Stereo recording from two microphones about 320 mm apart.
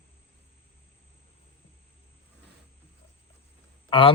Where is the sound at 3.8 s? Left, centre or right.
Centre.